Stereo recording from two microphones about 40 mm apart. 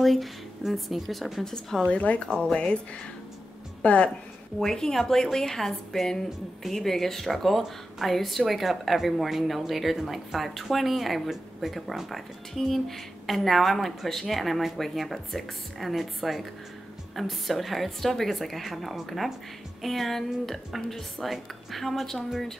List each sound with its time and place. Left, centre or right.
0.0 s speech: centre
1.4 s a woman's voice: centre
1.9 s speech: left
3.8 s speech: left
4.6 s a woman's voice: centre